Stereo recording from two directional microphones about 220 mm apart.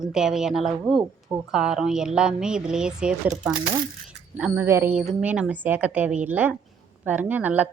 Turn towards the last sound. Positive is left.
turn(degrees=-10)  # may be behind; listen again after turning